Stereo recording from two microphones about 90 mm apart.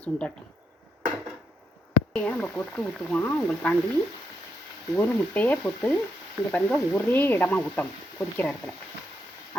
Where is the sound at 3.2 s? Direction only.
20° left (ahead or behind).